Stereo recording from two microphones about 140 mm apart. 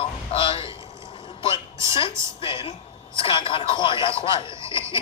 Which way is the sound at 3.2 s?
40° left (ahead or behind).